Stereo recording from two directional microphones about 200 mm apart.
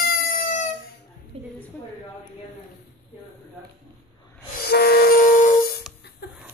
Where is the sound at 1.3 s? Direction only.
30° right (ahead or behind).